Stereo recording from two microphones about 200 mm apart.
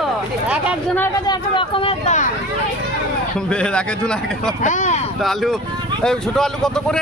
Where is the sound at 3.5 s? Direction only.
5° left (ahead or behind).